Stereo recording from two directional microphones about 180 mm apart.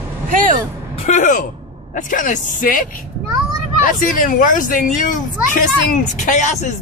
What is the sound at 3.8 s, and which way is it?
Speech, 50° left (ahead or behind).